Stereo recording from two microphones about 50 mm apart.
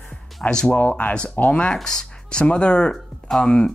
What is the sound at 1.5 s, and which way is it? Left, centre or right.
Speech, left.